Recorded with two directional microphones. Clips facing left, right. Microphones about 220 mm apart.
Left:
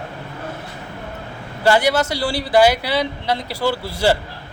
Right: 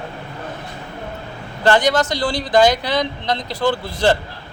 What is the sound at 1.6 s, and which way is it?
Speech, 10° left (ahead or behind).